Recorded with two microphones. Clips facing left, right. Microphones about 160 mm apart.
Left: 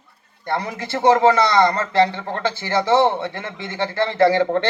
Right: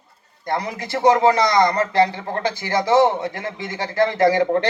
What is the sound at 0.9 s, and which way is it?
Speech, 30° left (ahead or behind).